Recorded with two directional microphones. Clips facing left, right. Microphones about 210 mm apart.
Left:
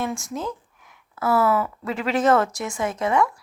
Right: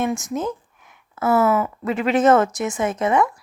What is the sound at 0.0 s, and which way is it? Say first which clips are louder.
Speech: right 5 dB; 20° right (ahead or behind).